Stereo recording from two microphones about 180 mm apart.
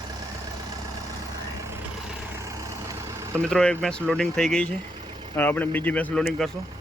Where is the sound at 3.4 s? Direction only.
5° left (ahead or behind).